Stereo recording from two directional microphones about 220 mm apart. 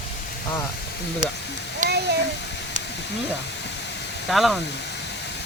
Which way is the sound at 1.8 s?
35° right (ahead or behind).